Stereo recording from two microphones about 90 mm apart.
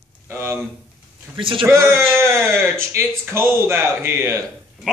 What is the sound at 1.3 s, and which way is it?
Speech, 70° right (ahead or behind).